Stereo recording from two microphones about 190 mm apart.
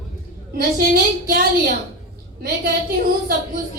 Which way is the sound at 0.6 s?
50° right (ahead or behind).